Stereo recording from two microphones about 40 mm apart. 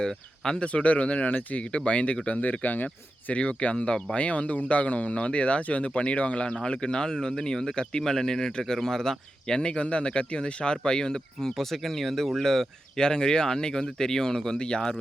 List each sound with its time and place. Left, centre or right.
0.0 s speech: centre
0.6 s speech: left
1.6 s speech: left
3.3 s speech: left; by 9.6 s centre
9.6 s speech: left